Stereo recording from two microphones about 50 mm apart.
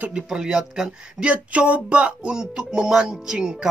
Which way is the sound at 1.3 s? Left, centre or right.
Right.